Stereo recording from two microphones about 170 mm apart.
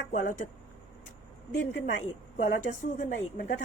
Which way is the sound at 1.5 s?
90° left.